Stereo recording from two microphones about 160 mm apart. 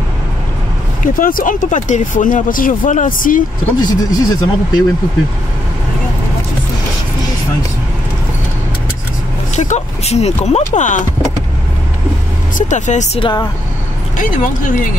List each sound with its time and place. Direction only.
1.0 s speech: 60° left (ahead or behind)
3.8 s speech: 25° left (ahead or behind)
9.6 s speech: 45° left (ahead or behind)
12.5 s speech: 50° left (ahead or behind)
13.2 s speech: 25° left (ahead or behind)
14.1 s speech: 55° left (ahead or behind)